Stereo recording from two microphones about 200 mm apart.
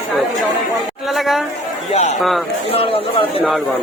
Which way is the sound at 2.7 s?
30° left (ahead or behind).